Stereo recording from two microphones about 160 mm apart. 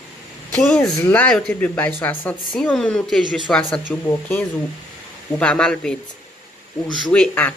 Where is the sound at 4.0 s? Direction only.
15° left (ahead or behind).